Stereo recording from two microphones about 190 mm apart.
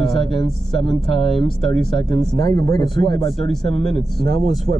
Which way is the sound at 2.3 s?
20° left (ahead or behind).